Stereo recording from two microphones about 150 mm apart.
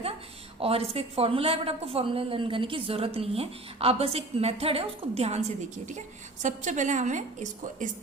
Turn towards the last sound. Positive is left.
turn(degrees=-60)  # may be behind; listen again after turning